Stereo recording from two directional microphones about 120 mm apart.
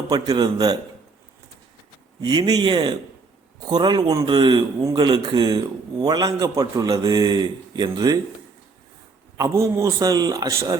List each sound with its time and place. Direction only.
0.1 s a man's voice: 35° right (ahead or behind)
2.2 s a man's voice: 35° right (ahead or behind)
4.8 s a man's voice: 25° right (ahead or behind)
5.0 s a man's voice: 40° right (ahead or behind)
9.4 s a man's voice: 25° right (ahead or behind)